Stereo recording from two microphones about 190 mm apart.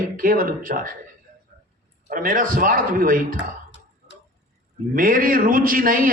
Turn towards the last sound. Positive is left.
turn(degrees=-45)  # may be behind; listen again after turning